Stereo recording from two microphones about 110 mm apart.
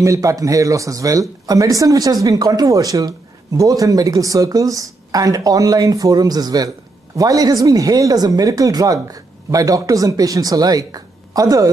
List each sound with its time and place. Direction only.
0.0 s speech: 30° right (ahead or behind)